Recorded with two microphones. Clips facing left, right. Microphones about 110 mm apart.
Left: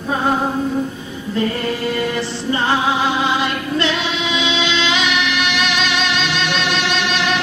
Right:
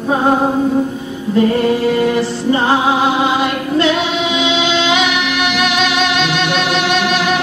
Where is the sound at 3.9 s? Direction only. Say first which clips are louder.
Right 5 dB; 55° right (ahead or behind).